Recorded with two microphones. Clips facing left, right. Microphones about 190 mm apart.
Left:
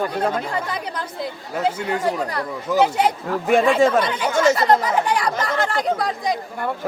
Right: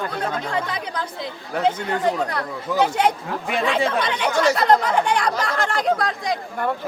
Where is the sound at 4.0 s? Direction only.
5° left (ahead or behind).